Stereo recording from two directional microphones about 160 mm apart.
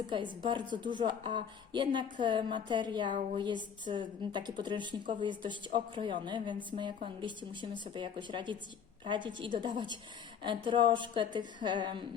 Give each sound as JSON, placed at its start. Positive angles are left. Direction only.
{"t": 0.1, "sound": "a woman's voice", "side_deg": -30}